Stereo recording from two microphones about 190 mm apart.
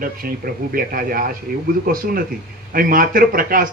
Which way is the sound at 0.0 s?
50° right (ahead or behind).